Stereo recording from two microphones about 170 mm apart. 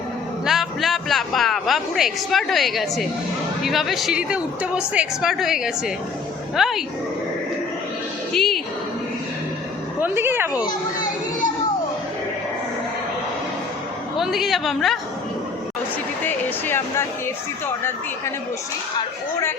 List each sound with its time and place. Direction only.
0.4 s a man's voice: centre (ahead or behind)
8.3 s music: centre (ahead or behind)
10.0 s speech: 15° right (ahead or behind)
10.5 s a child's voice: 25° left (ahead or behind)
14.2 s a woman's voice: centre (ahead or behind)
16.2 s speech: 15° left (ahead or behind)